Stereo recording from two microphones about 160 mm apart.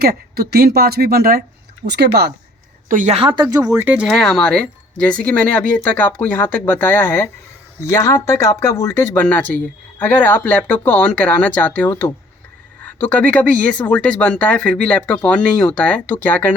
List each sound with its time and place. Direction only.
0.0 s speech: 70° right (ahead or behind); by 2.3 s 90° right
2.9 s a woman's voice: 50° right (ahead or behind)
3.2 s speech: 35° right (ahead or behind)
3.8 s speech: 10° right (ahead or behind)
4.0 s speech: centre (ahead or behind)